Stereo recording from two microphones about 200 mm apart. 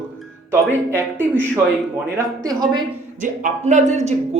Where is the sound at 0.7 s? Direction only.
10° right (ahead or behind).